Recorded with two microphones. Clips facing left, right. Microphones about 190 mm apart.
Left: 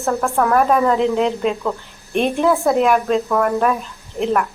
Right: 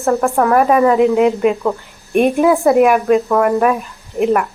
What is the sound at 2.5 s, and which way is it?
A woman's voice, centre (ahead or behind).